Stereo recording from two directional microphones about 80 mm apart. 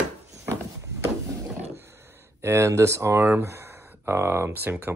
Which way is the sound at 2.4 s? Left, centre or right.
Right.